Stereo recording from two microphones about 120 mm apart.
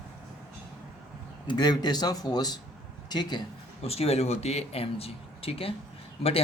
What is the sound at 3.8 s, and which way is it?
Speech, 55° left (ahead or behind).